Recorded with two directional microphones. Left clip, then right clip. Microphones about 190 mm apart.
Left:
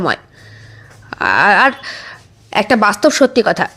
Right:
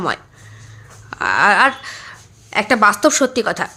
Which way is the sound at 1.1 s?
25° left (ahead or behind).